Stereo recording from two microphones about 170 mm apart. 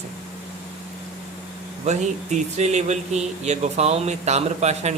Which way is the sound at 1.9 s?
40° right (ahead or behind).